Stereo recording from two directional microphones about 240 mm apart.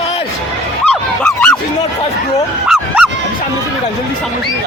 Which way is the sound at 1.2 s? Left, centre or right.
Centre.